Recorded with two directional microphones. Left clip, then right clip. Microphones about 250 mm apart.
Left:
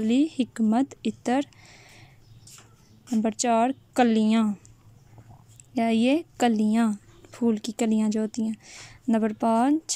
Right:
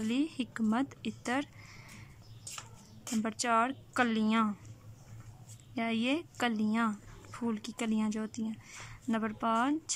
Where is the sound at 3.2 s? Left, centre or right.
Centre.